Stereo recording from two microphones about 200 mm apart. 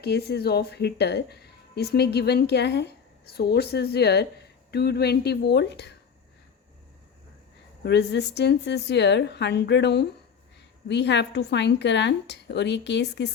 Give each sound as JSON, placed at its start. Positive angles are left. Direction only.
{"t": 0.0, "sound": "a woman's voice", "side_deg": 55}
{"t": 7.9, "sound": "a woman's voice", "side_deg": 55}